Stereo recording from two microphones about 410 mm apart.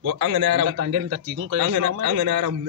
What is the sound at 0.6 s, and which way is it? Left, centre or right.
Speech, right.